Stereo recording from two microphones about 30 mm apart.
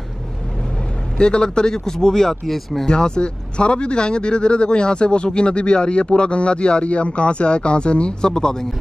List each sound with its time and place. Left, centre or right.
1.1 s speech: left; by 2.9 s centre
2.9 s speech: left
8.3 s speech: left